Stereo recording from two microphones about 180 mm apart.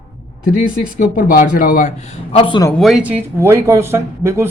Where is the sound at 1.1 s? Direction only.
50° left (ahead or behind); by 2.6 s 30° left (ahead or behind).